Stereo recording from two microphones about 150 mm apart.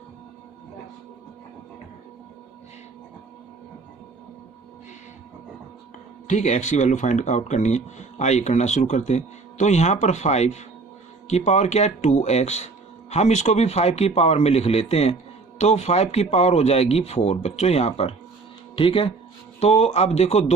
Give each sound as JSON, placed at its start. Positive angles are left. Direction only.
{"t": 6.2, "sound": "speech", "side_deg": 50}